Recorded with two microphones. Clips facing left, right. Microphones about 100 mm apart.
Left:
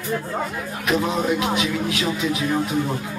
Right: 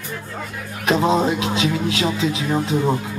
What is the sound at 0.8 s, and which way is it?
Speech, 25° right (ahead or behind).